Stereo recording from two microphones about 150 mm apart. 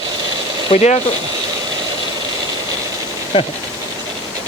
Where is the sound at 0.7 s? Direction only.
50° left (ahead or behind).